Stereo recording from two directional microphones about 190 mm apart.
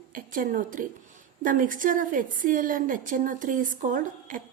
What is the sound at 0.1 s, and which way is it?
A woman's voice, 45° right (ahead or behind).